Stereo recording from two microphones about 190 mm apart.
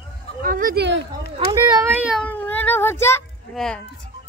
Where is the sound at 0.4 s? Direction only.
45° right (ahead or behind).